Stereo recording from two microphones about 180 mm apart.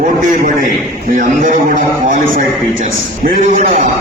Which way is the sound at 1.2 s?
45° right (ahead or behind).